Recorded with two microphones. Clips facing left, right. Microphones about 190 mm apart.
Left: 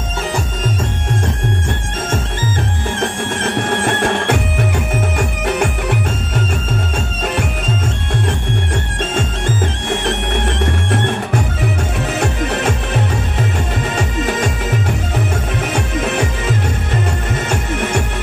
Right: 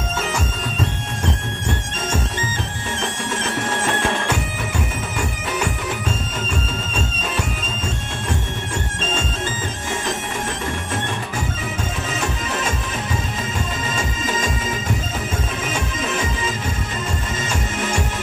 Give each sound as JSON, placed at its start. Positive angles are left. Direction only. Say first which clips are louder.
{"t": 3.0, "sound": "music", "louder": "left 5 dB", "side_deg": 60}
{"t": 9.8, "sound": "music", "louder": "left 4 dB", "side_deg": 65}